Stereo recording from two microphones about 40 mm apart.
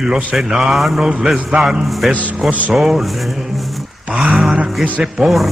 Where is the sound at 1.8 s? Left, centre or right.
Centre.